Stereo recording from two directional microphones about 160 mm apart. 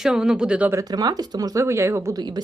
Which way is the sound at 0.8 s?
25° right (ahead or behind).